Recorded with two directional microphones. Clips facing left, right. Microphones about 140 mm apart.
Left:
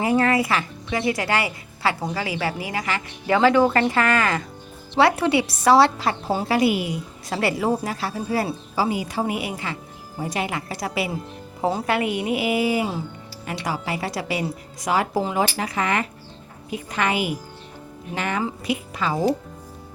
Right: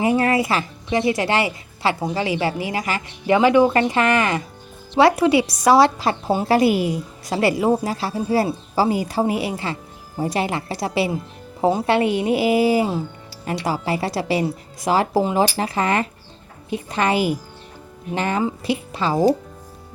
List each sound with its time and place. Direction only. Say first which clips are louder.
0.0 s a woman's voice: right 1 dB; 25° right (ahead or behind)
6.5 s speech: right 4 dB; 40° right (ahead or behind)
7.3 s speech: right 4 dB; 20° right (ahead or behind)